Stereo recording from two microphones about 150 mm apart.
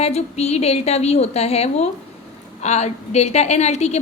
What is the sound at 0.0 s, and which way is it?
A woman's voice, 45° left (ahead or behind).